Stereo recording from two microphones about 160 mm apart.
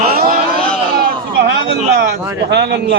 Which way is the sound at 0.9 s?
70° right (ahead or behind).